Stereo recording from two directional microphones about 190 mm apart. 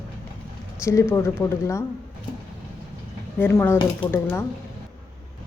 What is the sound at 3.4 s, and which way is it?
Speech, 10° left (ahead or behind).